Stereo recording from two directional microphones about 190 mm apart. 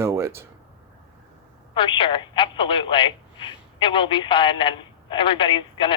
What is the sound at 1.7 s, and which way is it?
Speech, 25° left (ahead or behind).